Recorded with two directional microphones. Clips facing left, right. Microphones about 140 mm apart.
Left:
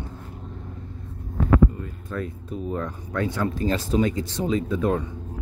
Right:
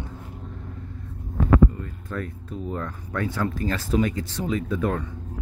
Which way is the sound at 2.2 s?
20° left (ahead or behind).